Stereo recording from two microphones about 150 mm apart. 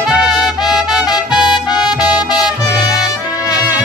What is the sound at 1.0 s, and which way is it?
Music, 30° left (ahead or behind).